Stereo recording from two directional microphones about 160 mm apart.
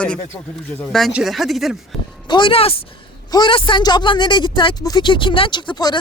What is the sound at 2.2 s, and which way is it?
Speech, 30° left (ahead or behind).